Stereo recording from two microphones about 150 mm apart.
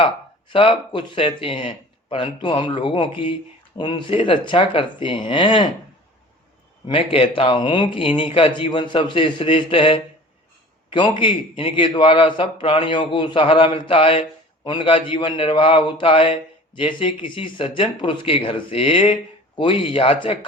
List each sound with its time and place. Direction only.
0.0 s a man's voice: 35° left (ahead or behind)
6.8 s a man's voice: 35° left (ahead or behind)